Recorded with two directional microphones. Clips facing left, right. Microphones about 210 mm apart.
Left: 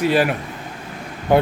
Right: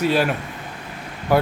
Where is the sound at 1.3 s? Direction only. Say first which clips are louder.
Left 2 dB; 20° left (ahead or behind).